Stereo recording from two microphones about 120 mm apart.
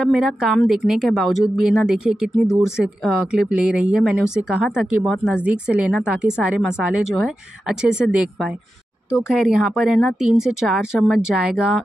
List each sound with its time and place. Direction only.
0.0 s speech: 5° right (ahead or behind)